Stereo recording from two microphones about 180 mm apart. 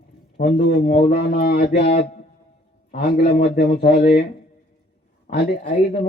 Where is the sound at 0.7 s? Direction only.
60° left (ahead or behind).